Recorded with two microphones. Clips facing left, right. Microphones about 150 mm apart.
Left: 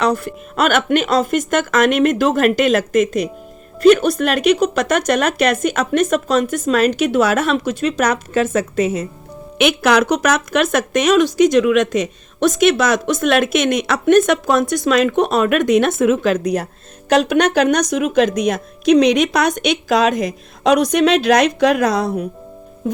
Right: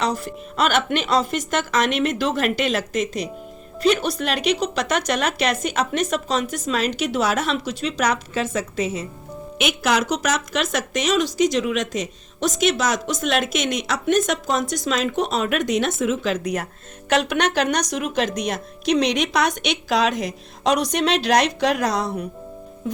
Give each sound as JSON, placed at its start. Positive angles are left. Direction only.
{"t": 0.0, "sound": "speech", "side_deg": 60}
{"t": 9.6, "sound": "a woman's voice", "side_deg": 65}
{"t": 17.1, "sound": "speech", "side_deg": 45}